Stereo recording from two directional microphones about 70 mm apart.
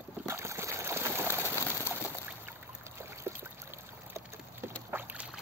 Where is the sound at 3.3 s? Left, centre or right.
Right.